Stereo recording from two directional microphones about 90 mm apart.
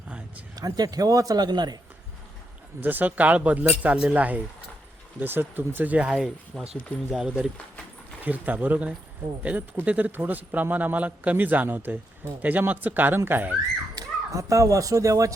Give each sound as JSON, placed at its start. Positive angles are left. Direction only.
{"t": 0.5, "sound": "a man's voice", "side_deg": -45}
{"t": 2.8, "sound": "speech", "side_deg": -20}
{"t": 6.5, "sound": "speech", "side_deg": 5}
{"t": 7.1, "sound": "speech", "side_deg": -10}
{"t": 13.9, "sound": "speech", "side_deg": -35}